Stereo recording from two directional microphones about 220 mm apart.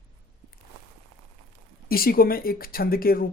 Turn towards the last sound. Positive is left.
turn(degrees=40)  # may be behind; listen again after turning